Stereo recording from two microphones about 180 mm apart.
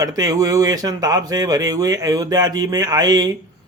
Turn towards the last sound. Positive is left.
turn(degrees=-20)  # may be behind; listen again after turning